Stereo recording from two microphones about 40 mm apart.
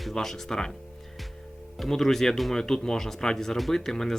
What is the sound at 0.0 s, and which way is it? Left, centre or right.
Speech, centre.